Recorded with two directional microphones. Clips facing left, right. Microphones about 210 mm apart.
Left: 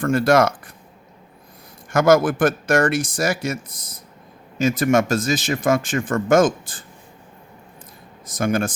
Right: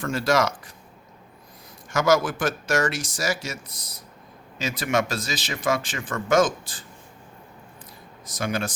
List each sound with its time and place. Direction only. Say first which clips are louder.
0.0 s speech: left 6 dB; 55° left (ahead or behind)
1.9 s speech: left 6 dB; 55° left (ahead or behind)
8.3 s speech: left 6 dB; 50° left (ahead or behind)